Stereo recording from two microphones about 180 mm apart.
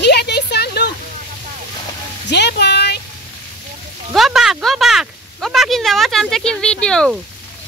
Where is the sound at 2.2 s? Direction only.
70° left (ahead or behind).